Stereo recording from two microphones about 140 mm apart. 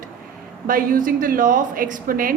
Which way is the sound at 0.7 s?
85° right.